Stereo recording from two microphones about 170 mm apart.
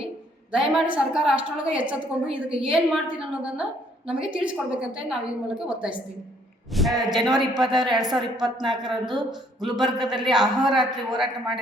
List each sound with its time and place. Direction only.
0.5 s a woman's voice: 5° right (ahead or behind)
7.6 s a woman's voice: 25° right (ahead or behind)
7.9 s a woman's voice: 5° right (ahead or behind)